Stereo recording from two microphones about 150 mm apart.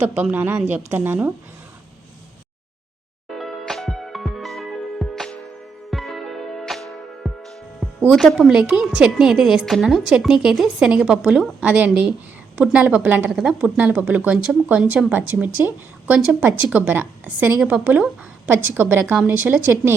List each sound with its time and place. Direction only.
0.0 s speech: 15° right (ahead or behind)
3.2 s music: centre (ahead or behind)
8.1 s a woman's voice: centre (ahead or behind)